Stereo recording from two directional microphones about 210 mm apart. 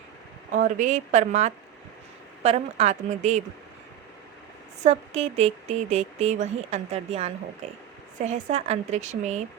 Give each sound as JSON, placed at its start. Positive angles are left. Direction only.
{"t": 0.5, "sound": "speech", "side_deg": -40}
{"t": 4.8, "sound": "speech", "side_deg": -30}